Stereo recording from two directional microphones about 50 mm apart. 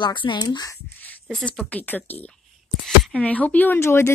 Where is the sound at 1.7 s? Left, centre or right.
Left.